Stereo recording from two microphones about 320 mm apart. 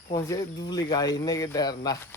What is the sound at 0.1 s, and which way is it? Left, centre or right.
Speech, centre.